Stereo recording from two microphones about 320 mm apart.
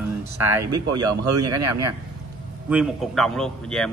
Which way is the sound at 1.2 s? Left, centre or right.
Right.